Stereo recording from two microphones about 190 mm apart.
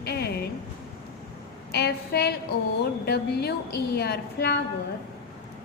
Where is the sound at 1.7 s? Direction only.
60° left (ahead or behind).